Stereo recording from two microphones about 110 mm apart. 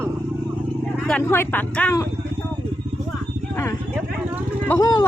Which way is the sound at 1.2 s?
20° left (ahead or behind).